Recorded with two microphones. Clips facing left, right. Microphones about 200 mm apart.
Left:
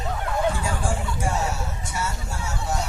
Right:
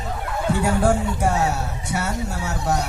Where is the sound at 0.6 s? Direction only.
65° right (ahead or behind).